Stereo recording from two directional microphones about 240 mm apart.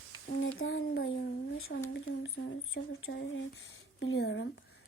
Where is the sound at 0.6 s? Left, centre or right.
Left.